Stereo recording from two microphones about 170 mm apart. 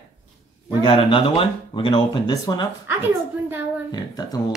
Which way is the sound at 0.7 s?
30° left (ahead or behind).